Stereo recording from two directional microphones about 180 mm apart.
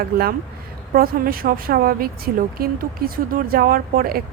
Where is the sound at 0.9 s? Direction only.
55° right (ahead or behind).